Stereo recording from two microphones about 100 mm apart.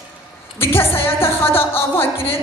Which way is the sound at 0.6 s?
25° left (ahead or behind).